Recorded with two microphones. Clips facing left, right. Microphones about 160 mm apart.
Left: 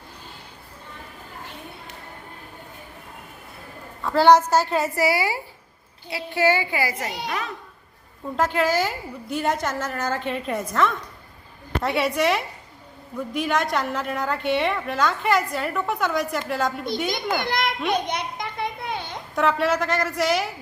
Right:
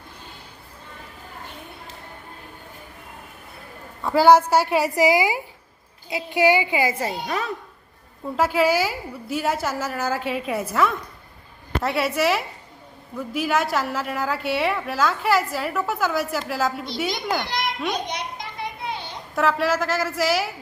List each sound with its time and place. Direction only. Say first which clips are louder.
4.0 s a woman's voice: right 1 dB; 10° right (ahead or behind); by 7.5 s 35° right (ahead or behind)
8.4 s a woman's voice: right 2 dB; 10° right (ahead or behind)
17.4 s a child's voice: left 3 dB; 55° left (ahead or behind)
18.1 s a sound: left 2 dB; 55° left (ahead or behind)
19.4 s a woman's voice: even; centre (ahead or behind)